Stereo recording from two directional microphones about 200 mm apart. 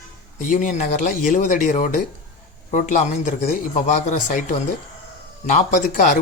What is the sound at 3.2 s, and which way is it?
Speech, 40° left (ahead or behind).